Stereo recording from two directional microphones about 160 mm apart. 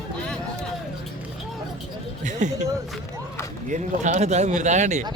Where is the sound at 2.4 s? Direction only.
50° right (ahead or behind).